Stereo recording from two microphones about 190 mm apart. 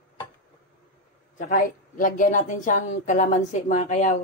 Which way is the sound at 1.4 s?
45° left (ahead or behind).